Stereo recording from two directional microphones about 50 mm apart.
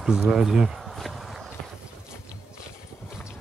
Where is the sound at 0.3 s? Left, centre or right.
Centre.